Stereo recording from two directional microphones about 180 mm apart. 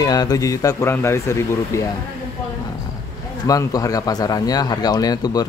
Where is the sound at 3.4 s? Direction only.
20° left (ahead or behind).